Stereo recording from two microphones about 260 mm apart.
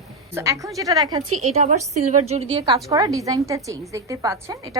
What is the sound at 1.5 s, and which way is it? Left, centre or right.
Speech, right.